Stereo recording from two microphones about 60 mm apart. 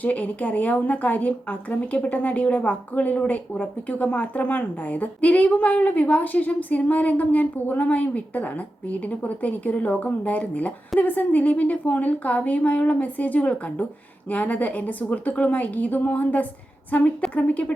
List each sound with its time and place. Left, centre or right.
0.0 s a woman's voice: left